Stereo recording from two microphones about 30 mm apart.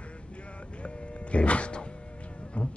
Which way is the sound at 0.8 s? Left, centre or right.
Left.